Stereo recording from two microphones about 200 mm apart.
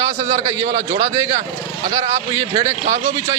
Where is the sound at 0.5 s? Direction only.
25° right (ahead or behind).